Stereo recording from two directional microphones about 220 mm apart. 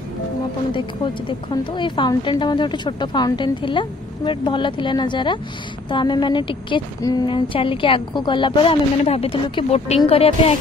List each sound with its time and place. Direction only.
0.7 s a woman's voice: 20° left (ahead or behind)